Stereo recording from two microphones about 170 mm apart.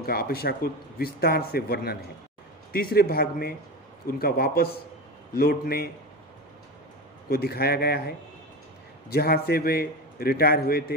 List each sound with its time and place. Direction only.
0.0 s speech: 65° left (ahead or behind)
7.2 s speech: 65° left (ahead or behind)